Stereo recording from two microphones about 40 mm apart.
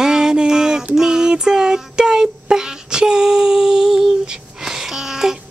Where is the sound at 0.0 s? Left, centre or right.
Centre.